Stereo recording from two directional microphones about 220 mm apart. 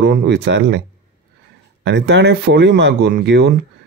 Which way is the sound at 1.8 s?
55° right (ahead or behind).